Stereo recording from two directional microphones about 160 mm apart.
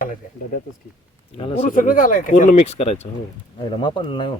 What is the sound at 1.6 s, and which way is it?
Speech, 60° left (ahead or behind).